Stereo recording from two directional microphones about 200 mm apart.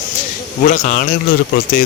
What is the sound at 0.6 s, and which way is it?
Speech, 35° left (ahead or behind).